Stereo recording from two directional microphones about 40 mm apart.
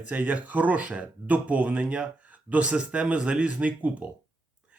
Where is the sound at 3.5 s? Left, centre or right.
Right.